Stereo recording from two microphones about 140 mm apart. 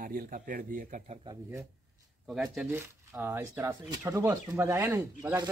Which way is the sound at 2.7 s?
15° right (ahead or behind).